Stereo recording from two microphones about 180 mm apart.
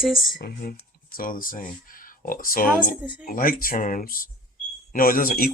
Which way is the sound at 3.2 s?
50° left (ahead or behind).